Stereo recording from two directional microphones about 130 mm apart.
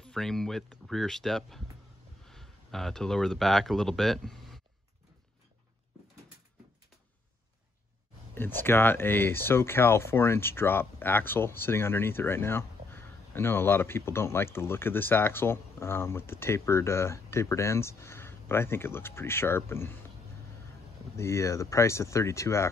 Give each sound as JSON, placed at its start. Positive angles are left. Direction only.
{"t": 0.0, "sound": "speech", "side_deg": 5}
{"t": 8.4, "sound": "speech", "side_deg": 15}
{"t": 21.2, "sound": "speech", "side_deg": 20}